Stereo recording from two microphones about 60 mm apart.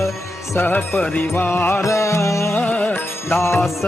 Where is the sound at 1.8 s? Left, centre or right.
Left.